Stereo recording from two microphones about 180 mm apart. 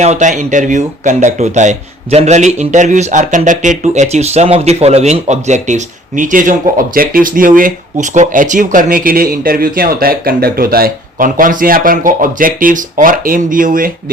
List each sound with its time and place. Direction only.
0.0 s speech: 40° right (ahead or behind)